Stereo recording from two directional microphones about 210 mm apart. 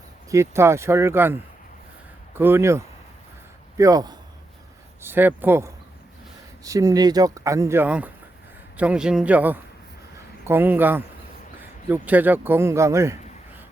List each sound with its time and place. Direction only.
0.3 s speech: 15° right (ahead or behind)
2.4 s speech: 10° right (ahead or behind)